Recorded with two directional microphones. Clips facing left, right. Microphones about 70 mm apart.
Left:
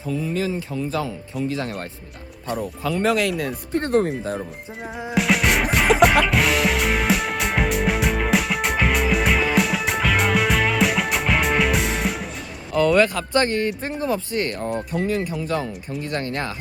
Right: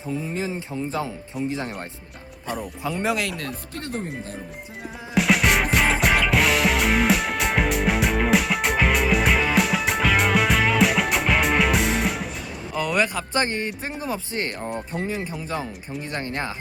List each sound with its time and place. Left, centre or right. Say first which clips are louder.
0.1 s speech: left 4 dB; right
2.9 s music: left 5 dB; centre
5.1 s music: even; centre
12.7 s speech: left 6 dB; centre
14.5 s music: left 4 dB; centre
14.9 s speech: left 6 dB; centre